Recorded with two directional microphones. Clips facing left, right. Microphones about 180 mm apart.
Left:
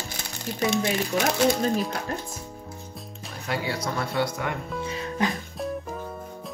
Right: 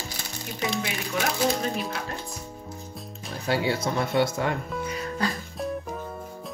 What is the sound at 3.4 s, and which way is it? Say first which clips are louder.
Speech: right 4 dB; 25° right (ahead or behind).